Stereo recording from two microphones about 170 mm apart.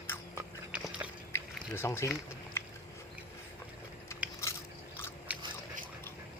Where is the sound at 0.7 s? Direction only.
5° right (ahead or behind).